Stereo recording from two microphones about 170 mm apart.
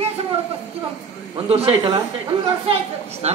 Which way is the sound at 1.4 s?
35° right (ahead or behind).